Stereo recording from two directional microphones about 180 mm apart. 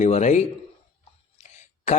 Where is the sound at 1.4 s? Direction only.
40° left (ahead or behind).